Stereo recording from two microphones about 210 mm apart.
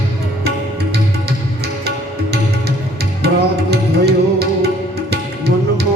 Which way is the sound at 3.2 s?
50° right (ahead or behind).